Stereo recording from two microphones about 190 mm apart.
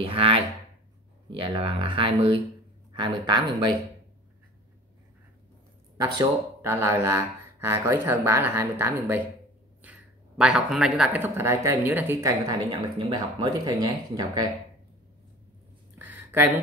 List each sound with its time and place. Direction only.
0.0 s speech: 30° right (ahead or behind)
6.1 s speech: 15° right (ahead or behind)
16.0 s a sound: 10° right (ahead or behind)